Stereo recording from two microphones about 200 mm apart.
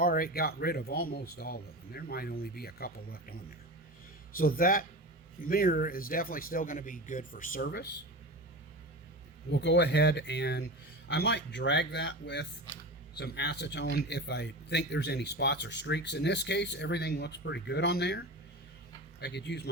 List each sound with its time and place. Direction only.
0.0 s speech: 45° left (ahead or behind)
4.4 s speech: 45° left (ahead or behind)
9.5 s speech: 60° left (ahead or behind)